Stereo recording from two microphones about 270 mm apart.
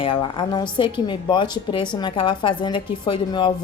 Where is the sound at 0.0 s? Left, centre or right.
Centre.